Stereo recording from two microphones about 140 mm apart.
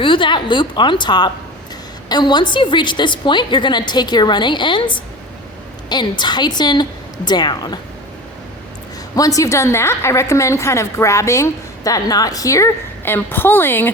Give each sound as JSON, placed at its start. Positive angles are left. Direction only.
{"t": 0.0, "sound": "a woman's voice", "side_deg": 35}
{"t": 5.9, "sound": "a woman's voice", "side_deg": 30}
{"t": 9.1, "sound": "a woman's voice", "side_deg": 25}